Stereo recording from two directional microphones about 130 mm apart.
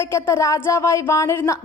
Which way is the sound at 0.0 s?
20° left (ahead or behind).